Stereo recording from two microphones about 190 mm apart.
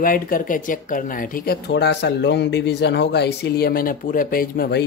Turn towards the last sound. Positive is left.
turn(degrees=55)  # may be behind; listen again after turning